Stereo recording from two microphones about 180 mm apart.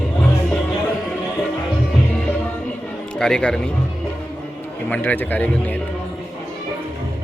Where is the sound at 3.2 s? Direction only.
5° left (ahead or behind).